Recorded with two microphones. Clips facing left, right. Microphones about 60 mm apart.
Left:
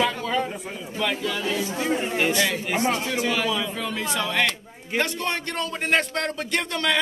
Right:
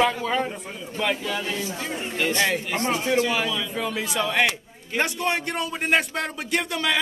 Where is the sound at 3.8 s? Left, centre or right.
Centre.